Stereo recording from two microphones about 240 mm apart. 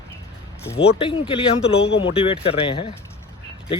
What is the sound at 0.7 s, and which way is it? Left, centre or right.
Speech, left.